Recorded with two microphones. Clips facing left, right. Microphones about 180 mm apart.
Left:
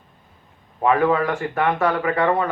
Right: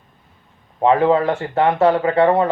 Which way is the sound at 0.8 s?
25° right (ahead or behind).